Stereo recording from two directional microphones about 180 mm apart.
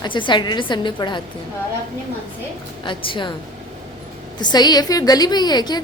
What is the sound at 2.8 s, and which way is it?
Speech, 25° left (ahead or behind).